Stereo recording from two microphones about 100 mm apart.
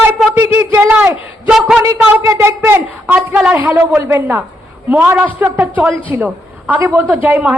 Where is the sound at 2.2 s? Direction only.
30° right (ahead or behind).